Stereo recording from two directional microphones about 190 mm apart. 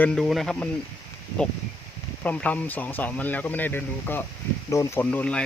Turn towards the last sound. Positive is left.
turn(degrees=10)  # may be behind; listen again after turning